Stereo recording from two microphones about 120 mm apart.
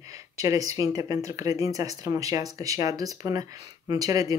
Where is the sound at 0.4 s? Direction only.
30° right (ahead or behind).